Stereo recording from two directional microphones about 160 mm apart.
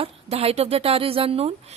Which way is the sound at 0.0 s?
40° right (ahead or behind).